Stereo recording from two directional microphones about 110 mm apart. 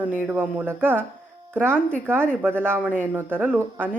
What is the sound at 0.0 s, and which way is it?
Speech, 15° right (ahead or behind).